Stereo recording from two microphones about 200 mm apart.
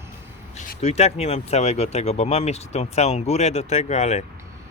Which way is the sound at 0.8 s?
30° left (ahead or behind).